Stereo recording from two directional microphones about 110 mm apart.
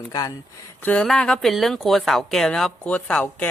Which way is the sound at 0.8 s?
15° left (ahead or behind).